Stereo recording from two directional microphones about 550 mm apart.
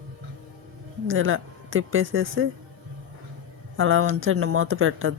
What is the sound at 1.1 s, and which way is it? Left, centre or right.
Speech, right.